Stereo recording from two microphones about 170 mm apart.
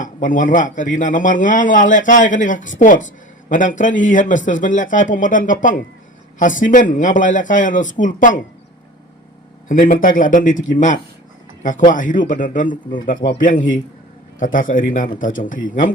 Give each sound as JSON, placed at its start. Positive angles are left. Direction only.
{"t": 0.0, "sound": "speech", "side_deg": 50}
{"t": 9.6, "sound": "speech", "side_deg": 55}